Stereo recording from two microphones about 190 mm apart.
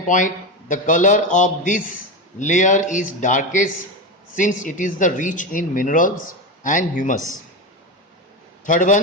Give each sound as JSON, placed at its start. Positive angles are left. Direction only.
{"t": 0.1, "sound": "a man's voice", "side_deg": 45}
{"t": 8.6, "sound": "a woman's voice", "side_deg": 40}